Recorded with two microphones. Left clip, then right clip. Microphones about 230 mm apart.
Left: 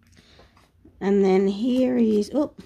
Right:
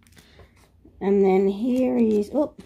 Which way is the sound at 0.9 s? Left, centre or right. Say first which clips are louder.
Right 1 dB; centre.